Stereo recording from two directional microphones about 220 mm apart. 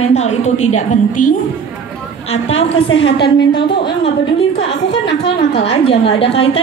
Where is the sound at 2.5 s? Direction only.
60° left (ahead or behind).